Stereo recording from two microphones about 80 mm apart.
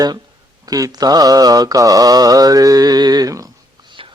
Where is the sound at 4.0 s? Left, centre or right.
Right.